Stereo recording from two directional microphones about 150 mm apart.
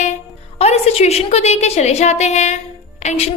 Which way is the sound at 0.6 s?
45° left (ahead or behind).